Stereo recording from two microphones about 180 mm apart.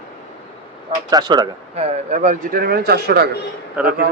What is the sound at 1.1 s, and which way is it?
Speech, 25° right (ahead or behind).